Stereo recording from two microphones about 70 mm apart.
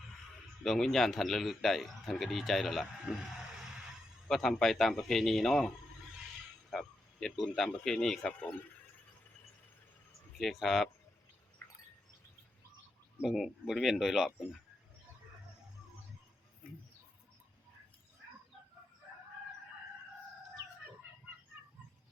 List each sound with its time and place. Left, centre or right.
0.6 s a man's voice: centre
10.3 s a man's voice: centre
11.6 s a sound: left
13.2 s a man's voice: centre